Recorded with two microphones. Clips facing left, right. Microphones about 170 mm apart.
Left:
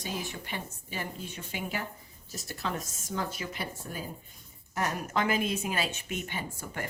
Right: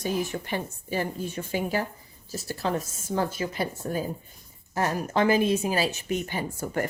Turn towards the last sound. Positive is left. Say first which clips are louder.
# right 8 dB
turn(degrees=-40)  # may be behind; listen again after turning